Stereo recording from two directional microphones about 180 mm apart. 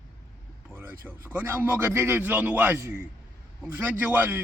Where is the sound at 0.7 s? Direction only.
10° right (ahead or behind).